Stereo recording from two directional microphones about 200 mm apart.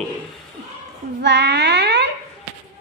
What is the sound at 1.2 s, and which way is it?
Speech, 60° right (ahead or behind).